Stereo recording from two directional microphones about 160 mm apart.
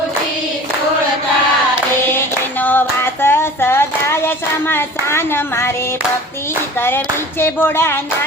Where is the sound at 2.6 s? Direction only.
10° left (ahead or behind).